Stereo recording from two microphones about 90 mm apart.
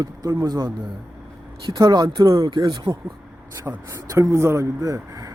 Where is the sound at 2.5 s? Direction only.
60° right (ahead or behind).